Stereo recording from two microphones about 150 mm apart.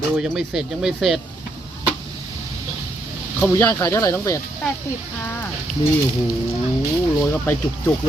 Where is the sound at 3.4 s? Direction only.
15° left (ahead or behind).